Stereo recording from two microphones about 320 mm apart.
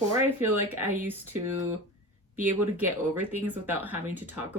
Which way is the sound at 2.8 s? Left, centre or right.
Centre.